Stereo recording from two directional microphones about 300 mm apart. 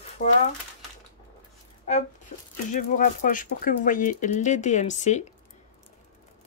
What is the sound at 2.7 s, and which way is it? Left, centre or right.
Speech, left.